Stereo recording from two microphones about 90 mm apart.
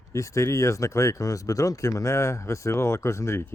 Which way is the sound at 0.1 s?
35° left (ahead or behind).